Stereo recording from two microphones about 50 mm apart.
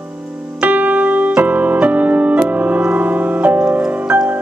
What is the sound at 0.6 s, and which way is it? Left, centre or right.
Music, right.